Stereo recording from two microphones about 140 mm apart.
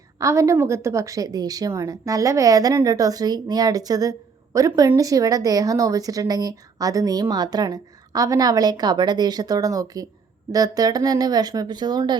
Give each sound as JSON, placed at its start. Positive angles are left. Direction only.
{"t": 0.2, "sound": "speech", "side_deg": -20}